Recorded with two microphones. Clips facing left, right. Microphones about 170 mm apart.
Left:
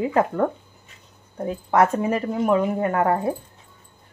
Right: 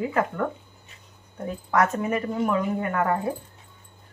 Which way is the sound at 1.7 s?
25° left (ahead or behind).